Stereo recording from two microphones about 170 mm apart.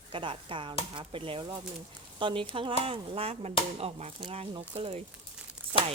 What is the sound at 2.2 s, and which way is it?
Speech, 30° right (ahead or behind).